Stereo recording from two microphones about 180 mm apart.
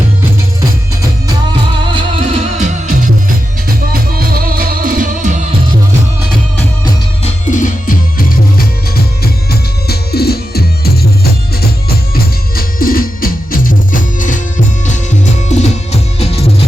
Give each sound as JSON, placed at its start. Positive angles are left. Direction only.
{"t": 1.9, "sound": "music", "side_deg": -30}
{"t": 3.9, "sound": "music", "side_deg": -55}
{"t": 7.3, "sound": "music", "side_deg": 40}
{"t": 9.2, "sound": "music", "side_deg": 60}
{"t": 15.4, "sound": "music", "side_deg": 40}